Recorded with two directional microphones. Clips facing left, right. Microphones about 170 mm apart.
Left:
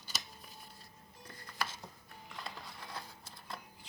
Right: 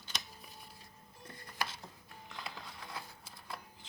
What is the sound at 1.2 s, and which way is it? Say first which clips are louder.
Music: right 2 dB; 25° right (ahead or behind).